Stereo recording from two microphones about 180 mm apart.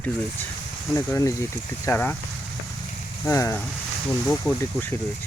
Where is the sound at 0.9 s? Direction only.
20° left (ahead or behind).